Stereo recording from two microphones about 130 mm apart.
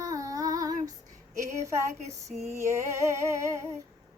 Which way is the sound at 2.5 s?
20° right (ahead or behind).